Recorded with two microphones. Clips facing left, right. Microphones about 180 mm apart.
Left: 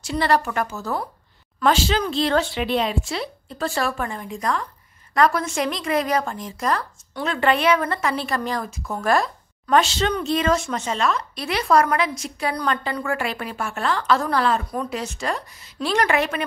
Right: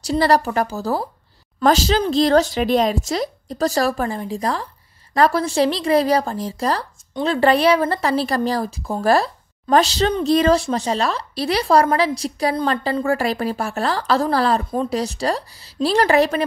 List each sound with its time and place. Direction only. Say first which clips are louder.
0.0 s speech: right 4 dB; 35° right (ahead or behind)